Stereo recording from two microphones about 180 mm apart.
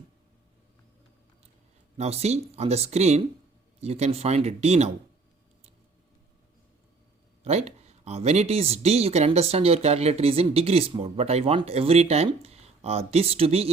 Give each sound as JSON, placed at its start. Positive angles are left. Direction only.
{"t": 2.0, "sound": "speech", "side_deg": -35}
{"t": 7.4, "sound": "speech", "side_deg": -35}